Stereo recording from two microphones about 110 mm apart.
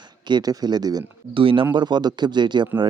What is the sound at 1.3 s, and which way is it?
Speech, 55° right (ahead or behind).